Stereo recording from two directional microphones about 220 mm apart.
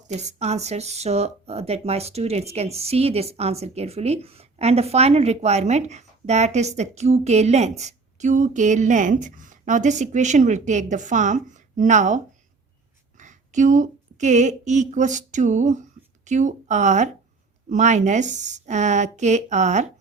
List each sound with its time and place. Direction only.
0.1 s speech: 30° right (ahead or behind)